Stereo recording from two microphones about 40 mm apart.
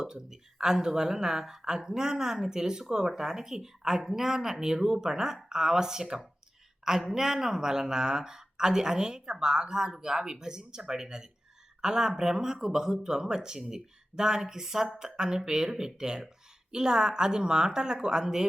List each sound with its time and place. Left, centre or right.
0.0 s speech: centre